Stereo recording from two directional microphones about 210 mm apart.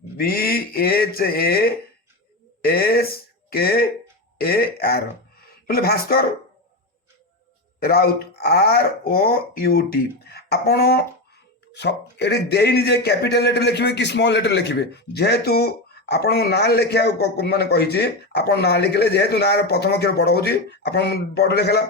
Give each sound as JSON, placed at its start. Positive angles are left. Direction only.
{"t": 0.2, "sound": "speech", "side_deg": 45}
{"t": 4.4, "sound": "a sound", "side_deg": 45}
{"t": 7.8, "sound": "speech", "side_deg": 45}